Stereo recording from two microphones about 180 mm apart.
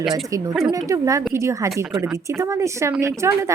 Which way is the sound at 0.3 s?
20° right (ahead or behind).